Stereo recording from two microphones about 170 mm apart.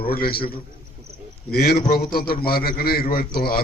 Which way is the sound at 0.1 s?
65° left (ahead or behind).